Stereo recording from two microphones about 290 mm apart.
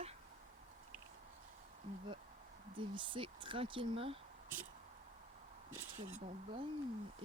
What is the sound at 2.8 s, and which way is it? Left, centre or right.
Speech, centre.